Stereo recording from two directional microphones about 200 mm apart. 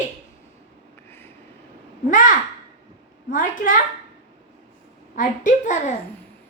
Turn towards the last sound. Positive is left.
turn(degrees=40)  # may be behind; listen again after turning